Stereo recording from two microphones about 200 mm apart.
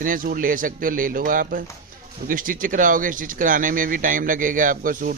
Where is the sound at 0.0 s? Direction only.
45° right (ahead or behind).